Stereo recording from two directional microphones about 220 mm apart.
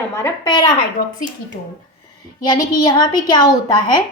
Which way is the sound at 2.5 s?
20° left (ahead or behind).